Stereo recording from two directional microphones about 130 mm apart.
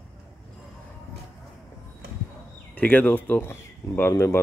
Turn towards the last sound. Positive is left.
turn(degrees=20)  # may be behind; listen again after turning